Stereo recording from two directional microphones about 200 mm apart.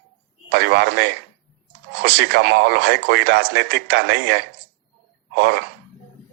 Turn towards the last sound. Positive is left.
turn(degrees=-55)  # may be behind; listen again after turning